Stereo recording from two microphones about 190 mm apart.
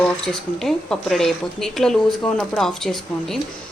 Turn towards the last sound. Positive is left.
turn(degrees=0)  # may be behind; listen again after turning